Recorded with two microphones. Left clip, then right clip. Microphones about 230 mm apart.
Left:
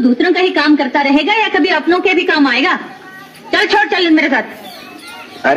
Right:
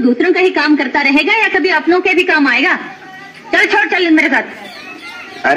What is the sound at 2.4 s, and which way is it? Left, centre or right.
A man's voice, left.